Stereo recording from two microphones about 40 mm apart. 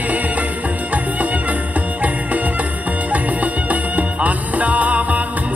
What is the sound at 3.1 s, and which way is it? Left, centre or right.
Music, right.